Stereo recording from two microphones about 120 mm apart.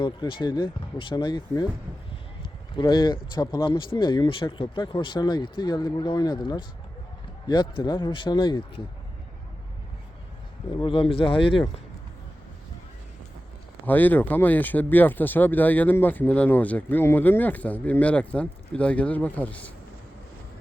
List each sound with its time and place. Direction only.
0.0 s speech: 45° left (ahead or behind)
2.7 s a man's voice: 40° left (ahead or behind)
10.8 s a man's voice: 45° left (ahead or behind)
13.8 s speech: 15° left (ahead or behind)